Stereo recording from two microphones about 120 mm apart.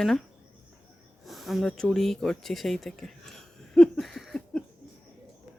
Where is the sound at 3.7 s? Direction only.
5° left (ahead or behind).